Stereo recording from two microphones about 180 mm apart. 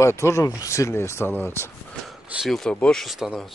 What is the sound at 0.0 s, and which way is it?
Speech, 15° left (ahead or behind).